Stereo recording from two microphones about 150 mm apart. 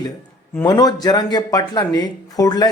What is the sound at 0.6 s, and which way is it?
Speech, 25° left (ahead or behind).